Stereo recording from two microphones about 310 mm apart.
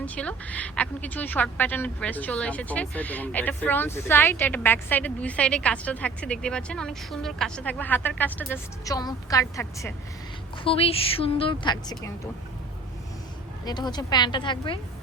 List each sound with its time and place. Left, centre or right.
0.0 s a woman's voice: centre
13.7 s a woman's voice: centre